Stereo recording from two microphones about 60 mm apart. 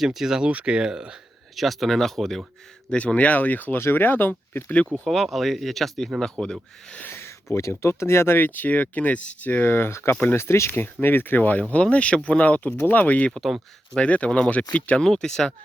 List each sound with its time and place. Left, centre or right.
0.0 s speech: centre
0.4 s speech: centre
1.5 s speech: centre
2.9 s speech: centre
3.8 s speech: left
5.0 s speech: centre
7.0 s a sound: left
7.5 s speech: left
10.7 s speech: left
13.3 s speech: centre
14.0 s speech: centre
15.0 s speech: centre